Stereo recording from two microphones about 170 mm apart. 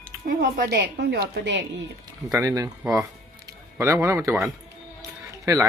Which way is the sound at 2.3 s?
20° right (ahead or behind).